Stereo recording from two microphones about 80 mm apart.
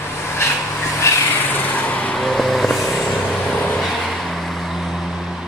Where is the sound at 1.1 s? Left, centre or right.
Left.